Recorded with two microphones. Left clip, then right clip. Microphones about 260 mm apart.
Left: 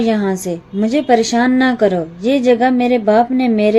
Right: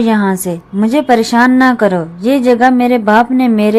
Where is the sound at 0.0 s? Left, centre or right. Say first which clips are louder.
Right 3 dB; centre.